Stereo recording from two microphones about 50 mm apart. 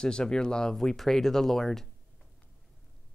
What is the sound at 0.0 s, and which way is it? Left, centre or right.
Speech, centre.